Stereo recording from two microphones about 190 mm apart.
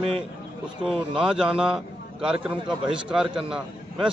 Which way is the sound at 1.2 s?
5° right (ahead or behind).